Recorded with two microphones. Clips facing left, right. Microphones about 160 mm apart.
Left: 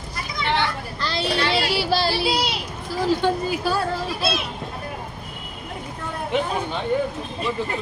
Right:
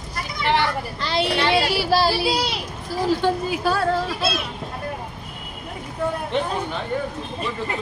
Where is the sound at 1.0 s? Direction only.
20° right (ahead or behind).